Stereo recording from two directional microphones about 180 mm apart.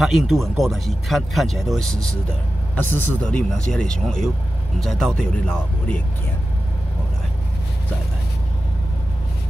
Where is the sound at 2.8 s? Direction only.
10° left (ahead or behind).